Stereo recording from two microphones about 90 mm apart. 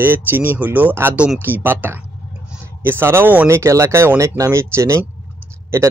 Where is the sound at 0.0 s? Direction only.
25° right (ahead or behind).